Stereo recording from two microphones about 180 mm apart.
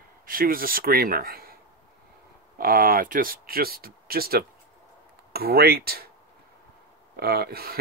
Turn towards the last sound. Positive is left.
turn(degrees=-60)  # may be behind; listen again after turning